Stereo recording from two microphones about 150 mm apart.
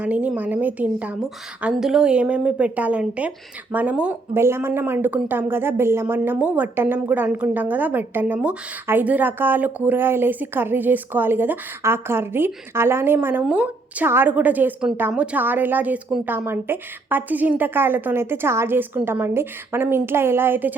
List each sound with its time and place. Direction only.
0.0 s a woman's voice: 10° right (ahead or behind)